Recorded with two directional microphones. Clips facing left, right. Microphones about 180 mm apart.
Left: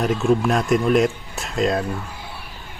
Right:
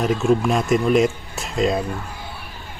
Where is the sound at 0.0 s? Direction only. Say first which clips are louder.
Even; centre (ahead or behind).